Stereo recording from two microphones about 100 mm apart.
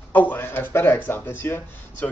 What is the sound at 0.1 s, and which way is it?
Speech, 15° left (ahead or behind).